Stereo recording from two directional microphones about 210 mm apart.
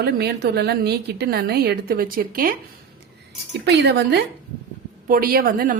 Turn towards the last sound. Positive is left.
turn(degrees=-40)  # may be behind; listen again after turning